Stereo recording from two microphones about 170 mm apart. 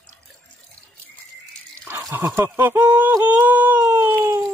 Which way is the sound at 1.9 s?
15° right (ahead or behind).